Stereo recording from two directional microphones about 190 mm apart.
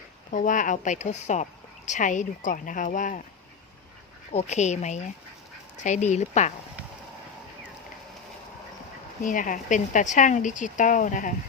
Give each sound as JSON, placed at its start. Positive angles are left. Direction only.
{"t": 0.3, "sound": "speech", "side_deg": 45}
{"t": 4.3, "sound": "speech", "side_deg": 35}
{"t": 9.2, "sound": "speech", "side_deg": 45}